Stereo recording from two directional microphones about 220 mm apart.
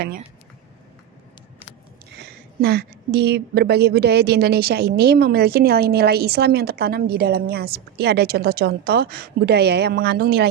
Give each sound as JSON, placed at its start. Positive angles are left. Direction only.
{"t": 2.1, "sound": "speech", "side_deg": -50}